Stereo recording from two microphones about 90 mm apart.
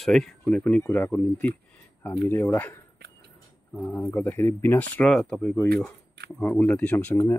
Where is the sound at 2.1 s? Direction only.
30° left (ahead or behind).